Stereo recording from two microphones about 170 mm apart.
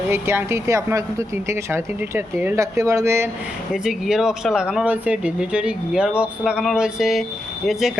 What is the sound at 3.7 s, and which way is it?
Speech, 5° right (ahead or behind).